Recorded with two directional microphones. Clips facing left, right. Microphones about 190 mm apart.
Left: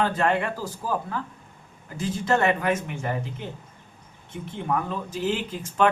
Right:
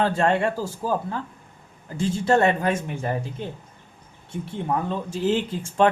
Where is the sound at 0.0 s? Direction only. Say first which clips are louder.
Right 3 dB; 30° right (ahead or behind).